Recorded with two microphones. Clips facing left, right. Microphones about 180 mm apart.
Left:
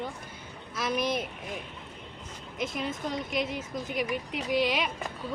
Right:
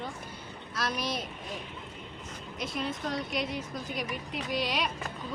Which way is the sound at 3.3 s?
50° left (ahead or behind).